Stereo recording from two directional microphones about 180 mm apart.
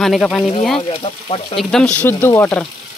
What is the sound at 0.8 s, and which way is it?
Speech, 30° left (ahead or behind).